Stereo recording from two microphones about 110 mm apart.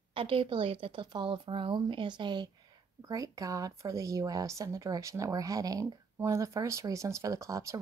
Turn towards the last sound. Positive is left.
turn(degrees=-30)  # may be behind; listen again after turning